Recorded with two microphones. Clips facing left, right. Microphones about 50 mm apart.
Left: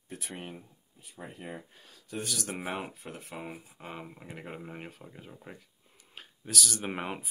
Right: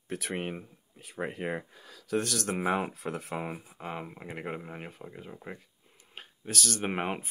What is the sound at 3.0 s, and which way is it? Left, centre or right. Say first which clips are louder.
Speech: right 8 dB; right.